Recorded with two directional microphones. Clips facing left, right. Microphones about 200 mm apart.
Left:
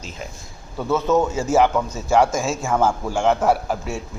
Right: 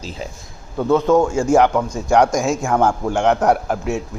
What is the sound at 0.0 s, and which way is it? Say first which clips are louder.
Speech: right 5 dB; 35° right (ahead or behind).